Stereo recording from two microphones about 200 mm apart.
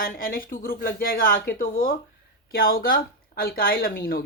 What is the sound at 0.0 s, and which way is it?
Speech, 45° left (ahead or behind).